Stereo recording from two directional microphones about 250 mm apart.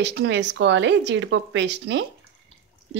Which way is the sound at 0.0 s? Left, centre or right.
Right.